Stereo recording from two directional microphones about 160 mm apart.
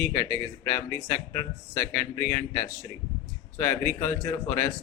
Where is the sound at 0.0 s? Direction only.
15° left (ahead or behind).